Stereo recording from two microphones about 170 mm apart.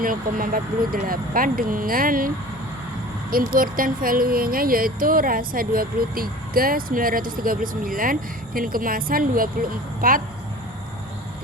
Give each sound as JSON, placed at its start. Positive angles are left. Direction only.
{"t": 0.0, "sound": "speech", "side_deg": -55}